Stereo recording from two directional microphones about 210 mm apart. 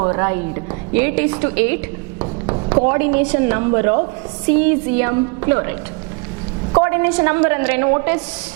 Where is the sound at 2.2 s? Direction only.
25° right (ahead or behind).